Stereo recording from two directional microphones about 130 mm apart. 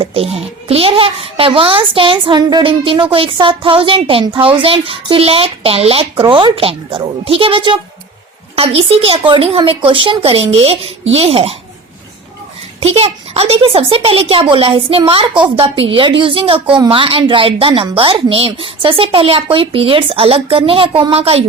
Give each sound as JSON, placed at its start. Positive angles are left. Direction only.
{"t": 0.0, "sound": "a child's voice", "side_deg": -50}
{"t": 12.8, "sound": "a child's voice", "side_deg": -50}